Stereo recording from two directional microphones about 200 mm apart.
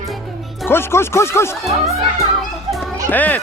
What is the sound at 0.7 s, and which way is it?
Speech, 10° left (ahead or behind).